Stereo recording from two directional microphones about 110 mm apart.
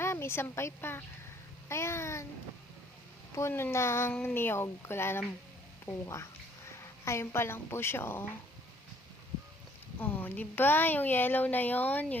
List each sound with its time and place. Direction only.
0.0 s a woman's voice: 25° left (ahead or behind)
3.3 s a woman's voice: 25° left (ahead or behind)
10.0 s speech: 15° left (ahead or behind)